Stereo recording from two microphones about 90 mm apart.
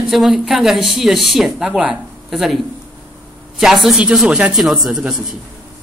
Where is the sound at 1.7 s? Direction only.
10° right (ahead or behind).